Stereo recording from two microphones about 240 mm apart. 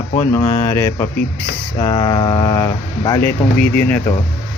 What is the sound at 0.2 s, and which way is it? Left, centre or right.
Speech, centre.